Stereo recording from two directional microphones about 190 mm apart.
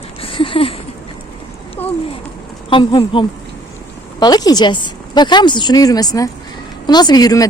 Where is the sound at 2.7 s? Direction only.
25° left (ahead or behind).